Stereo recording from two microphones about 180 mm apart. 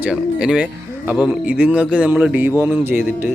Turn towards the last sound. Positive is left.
turn(degrees=-10)  # may be behind; listen again after turning